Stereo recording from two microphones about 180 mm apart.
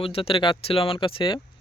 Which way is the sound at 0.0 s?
30° left (ahead or behind).